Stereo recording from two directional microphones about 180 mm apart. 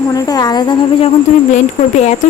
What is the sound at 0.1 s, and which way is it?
A woman's voice, 20° left (ahead or behind).